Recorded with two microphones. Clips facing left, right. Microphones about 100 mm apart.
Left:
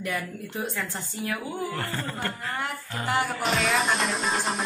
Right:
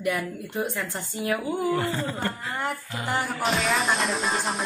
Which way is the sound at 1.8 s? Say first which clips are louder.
Right 4 dB; 15° right (ahead or behind).